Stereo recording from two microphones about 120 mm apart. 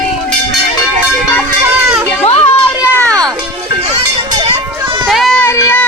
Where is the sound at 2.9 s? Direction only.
25° right (ahead or behind).